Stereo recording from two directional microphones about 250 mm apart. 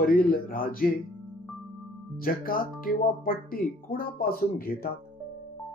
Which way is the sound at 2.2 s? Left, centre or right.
Left.